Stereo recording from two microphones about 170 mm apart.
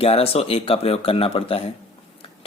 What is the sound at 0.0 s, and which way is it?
Speech, 35° left (ahead or behind).